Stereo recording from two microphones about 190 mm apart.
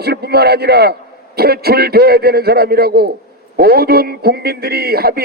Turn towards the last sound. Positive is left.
turn(degrees=-55)  # may be behind; listen again after turning